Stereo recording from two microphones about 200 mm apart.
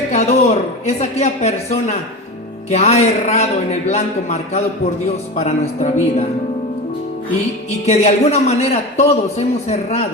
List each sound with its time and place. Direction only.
0.1 s a man's voice: 35° left (ahead or behind)
7.9 s a man's voice: 35° left (ahead or behind)